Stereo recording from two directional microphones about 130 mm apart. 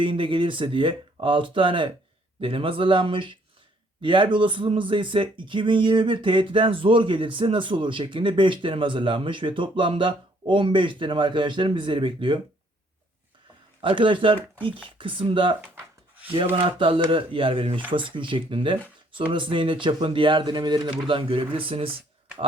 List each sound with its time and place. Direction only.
0.0 s speech: 40° right (ahead or behind)
13.8 s speech: 40° right (ahead or behind)
16.6 s speech: 40° right (ahead or behind)